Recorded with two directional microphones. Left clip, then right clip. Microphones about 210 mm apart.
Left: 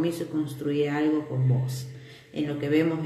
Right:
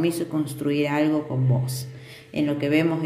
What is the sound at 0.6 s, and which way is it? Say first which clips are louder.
Speech: right 3 dB; 50° right (ahead or behind).